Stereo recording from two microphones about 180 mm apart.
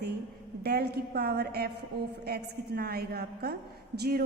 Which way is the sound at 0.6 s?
60° right (ahead or behind).